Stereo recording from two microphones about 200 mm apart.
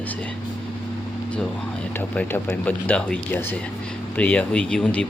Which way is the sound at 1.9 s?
10° left (ahead or behind).